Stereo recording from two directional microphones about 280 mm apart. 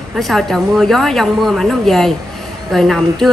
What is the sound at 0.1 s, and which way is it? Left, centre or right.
Speech, centre.